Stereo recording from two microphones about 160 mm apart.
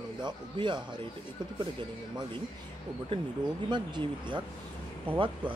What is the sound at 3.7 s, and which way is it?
Speech, 30° right (ahead or behind).